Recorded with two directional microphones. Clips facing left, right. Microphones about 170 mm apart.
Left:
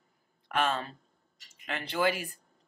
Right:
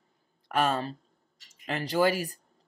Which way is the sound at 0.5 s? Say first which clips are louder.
Right 3 dB; 40° right (ahead or behind).